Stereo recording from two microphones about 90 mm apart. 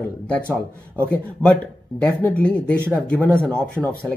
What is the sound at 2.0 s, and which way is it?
Speech, 15° left (ahead or behind).